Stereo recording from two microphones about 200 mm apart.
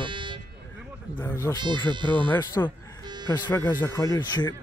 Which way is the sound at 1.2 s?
15° left (ahead or behind).